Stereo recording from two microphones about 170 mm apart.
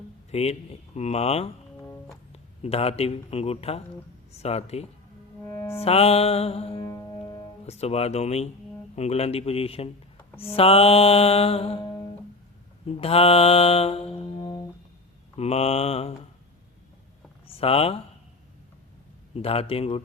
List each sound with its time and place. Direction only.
0.3 s speech: 40° left (ahead or behind)
0.9 s mantra: 40° left (ahead or behind)
2.3 s speech: 35° left (ahead or behind)
4.3 s mantra: 40° left (ahead or behind)
5.5 s music: 20° left (ahead or behind)
5.7 s mantra: 35° left (ahead or behind)
6.8 s music: 20° left (ahead or behind)
7.6 s mantra: 40° left (ahead or behind)
13.0 s music: 35° left (ahead or behind)
15.4 s mantra: 40° left (ahead or behind)
17.5 s speech: 35° left (ahead or behind)
19.4 s mantra: 35° left (ahead or behind)